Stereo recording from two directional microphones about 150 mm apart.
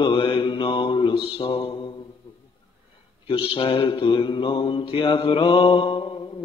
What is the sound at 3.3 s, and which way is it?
Mantra, 35° left (ahead or behind).